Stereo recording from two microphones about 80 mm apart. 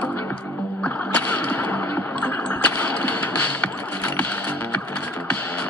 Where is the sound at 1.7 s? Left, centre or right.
Left.